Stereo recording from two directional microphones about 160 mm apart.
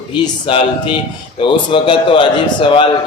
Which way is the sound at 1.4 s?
30° left (ahead or behind).